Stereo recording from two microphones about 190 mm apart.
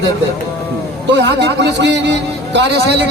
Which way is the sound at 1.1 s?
70° right (ahead or behind).